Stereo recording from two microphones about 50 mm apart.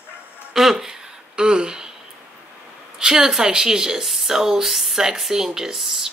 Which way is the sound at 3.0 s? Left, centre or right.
Centre.